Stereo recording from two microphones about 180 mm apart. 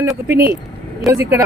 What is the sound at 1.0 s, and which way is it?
Speech, 15° right (ahead or behind).